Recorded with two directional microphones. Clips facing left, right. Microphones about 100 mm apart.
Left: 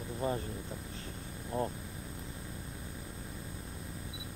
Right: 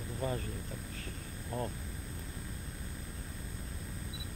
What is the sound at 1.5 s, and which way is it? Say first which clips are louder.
Speech: left 3 dB; 20° left (ahead or behind).